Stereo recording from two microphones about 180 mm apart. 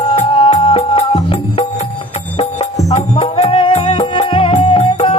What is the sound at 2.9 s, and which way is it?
Music, 35° left (ahead or behind).